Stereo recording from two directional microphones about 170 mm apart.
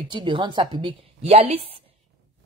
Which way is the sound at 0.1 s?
25° right (ahead or behind).